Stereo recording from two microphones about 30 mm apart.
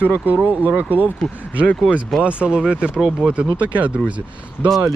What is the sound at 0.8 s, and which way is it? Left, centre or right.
Speech, right.